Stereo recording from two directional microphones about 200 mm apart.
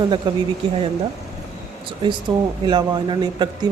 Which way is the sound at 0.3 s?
20° right (ahead or behind).